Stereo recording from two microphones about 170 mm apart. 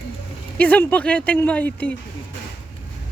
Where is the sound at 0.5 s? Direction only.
10° left (ahead or behind).